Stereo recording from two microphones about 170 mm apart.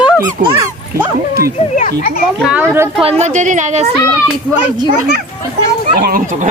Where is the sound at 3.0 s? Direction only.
40° right (ahead or behind).